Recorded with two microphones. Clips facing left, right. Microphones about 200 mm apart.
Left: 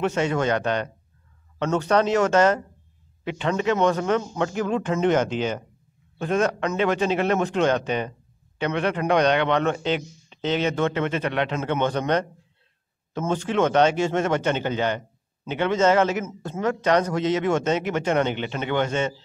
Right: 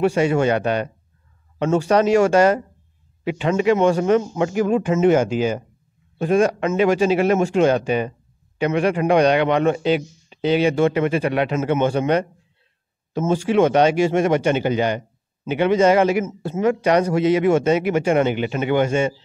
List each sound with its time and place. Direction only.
0.0 s speech: 10° right (ahead or behind)